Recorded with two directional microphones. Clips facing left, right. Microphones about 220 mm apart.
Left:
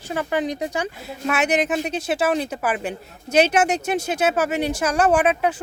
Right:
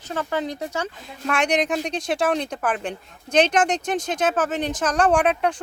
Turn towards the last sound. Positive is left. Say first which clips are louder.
# left 1 dB
turn(degrees=5)  # may be behind; listen again after turning